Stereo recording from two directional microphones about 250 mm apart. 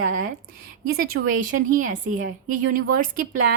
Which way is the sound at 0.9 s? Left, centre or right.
Right.